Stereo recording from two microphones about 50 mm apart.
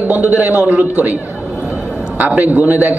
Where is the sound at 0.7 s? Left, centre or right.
Right.